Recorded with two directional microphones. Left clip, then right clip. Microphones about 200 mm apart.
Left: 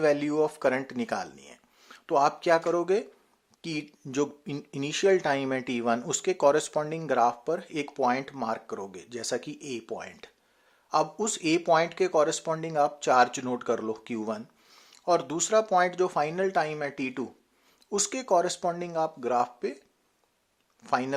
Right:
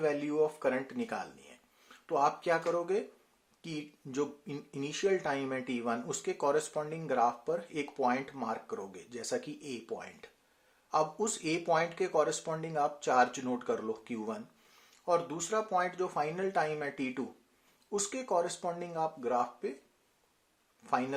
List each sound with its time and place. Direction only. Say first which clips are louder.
0.0 s speech: left 6 dB; 40° left (ahead or behind)
20.8 s speech: left 5 dB; 30° left (ahead or behind)